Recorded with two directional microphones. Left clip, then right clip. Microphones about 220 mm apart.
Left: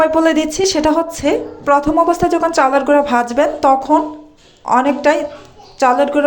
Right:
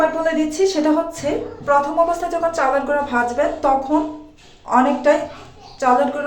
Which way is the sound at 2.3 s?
40° left (ahead or behind).